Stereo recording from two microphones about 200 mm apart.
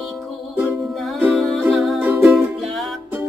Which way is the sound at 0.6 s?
Centre (ahead or behind).